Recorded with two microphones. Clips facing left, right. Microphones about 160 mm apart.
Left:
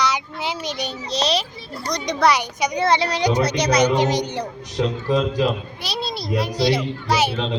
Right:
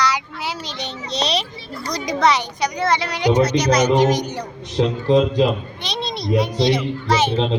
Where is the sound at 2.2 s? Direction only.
10° left (ahead or behind).